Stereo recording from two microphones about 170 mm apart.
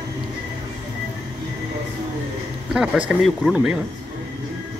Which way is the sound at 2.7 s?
5° right (ahead or behind).